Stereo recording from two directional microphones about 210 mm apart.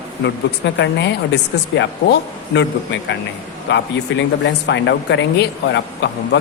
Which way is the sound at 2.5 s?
60° left (ahead or behind).